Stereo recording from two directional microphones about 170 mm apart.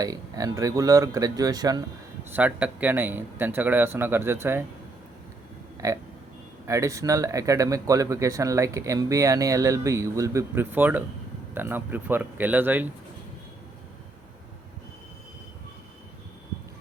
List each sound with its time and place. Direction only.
0.0 s speech: 20° right (ahead or behind)
2.3 s speech: 10° right (ahead or behind)
5.8 s speech: 20° right (ahead or behind)